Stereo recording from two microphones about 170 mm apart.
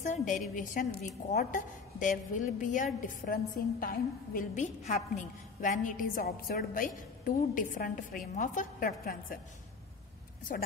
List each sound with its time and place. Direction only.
0.0 s a woman's voice: 45° left (ahead or behind)